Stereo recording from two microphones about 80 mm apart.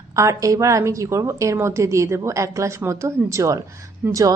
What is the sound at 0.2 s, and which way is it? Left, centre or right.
A woman's voice, right.